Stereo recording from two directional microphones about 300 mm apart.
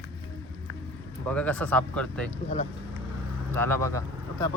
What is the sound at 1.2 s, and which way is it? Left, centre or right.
Speech, centre.